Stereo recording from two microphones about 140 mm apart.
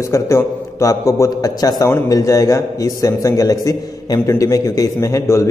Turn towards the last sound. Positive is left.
turn(degrees=20)  # may be behind; listen again after turning